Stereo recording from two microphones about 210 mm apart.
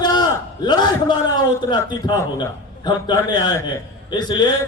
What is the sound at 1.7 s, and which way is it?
A man's voice, 20° left (ahead or behind).